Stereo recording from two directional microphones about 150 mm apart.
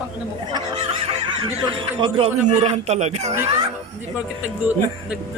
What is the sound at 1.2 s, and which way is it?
Speech, 35° right (ahead or behind).